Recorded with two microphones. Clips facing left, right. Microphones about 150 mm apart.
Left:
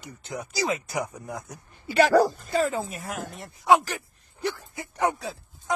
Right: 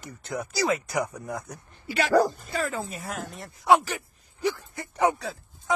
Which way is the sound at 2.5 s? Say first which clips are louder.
Left 5 dB; 25° left (ahead or behind).